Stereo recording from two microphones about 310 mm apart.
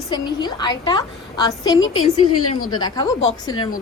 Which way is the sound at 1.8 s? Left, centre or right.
Left.